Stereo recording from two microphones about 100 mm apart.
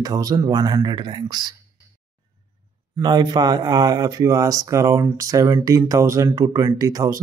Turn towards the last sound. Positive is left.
turn(degrees=-35)  # may be behind; listen again after turning